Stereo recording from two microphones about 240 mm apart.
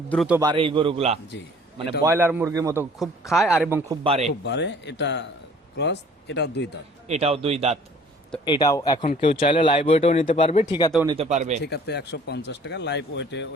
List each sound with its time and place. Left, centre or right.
0.1 s speech: centre
0.3 s a man's voice: centre
2.0 s a man's voice: centre
3.0 s speech: centre
4.0 s a man's voice: right
4.4 s speech: left
7.1 s a man's voice: right
8.4 s speech: centre
11.0 s a man's voice: centre
11.3 s speech: right
11.6 s speech: left